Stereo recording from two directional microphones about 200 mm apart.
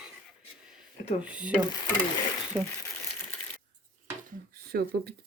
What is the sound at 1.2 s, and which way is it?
Speech, 5° right (ahead or behind).